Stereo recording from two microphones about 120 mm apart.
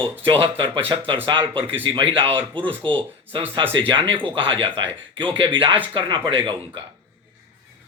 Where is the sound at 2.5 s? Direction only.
10° left (ahead or behind).